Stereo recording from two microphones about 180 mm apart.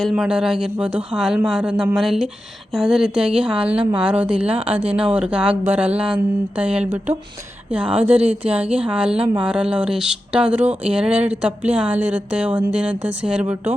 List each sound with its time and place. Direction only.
0.0 s a woman's voice: 5° right (ahead or behind)
9.1 s speech: 35° right (ahead or behind)
9.4 s speech: 5° right (ahead or behind)
10.6 s speech: 40° right (ahead or behind)
10.9 s a woman's voice: 5° right (ahead or behind)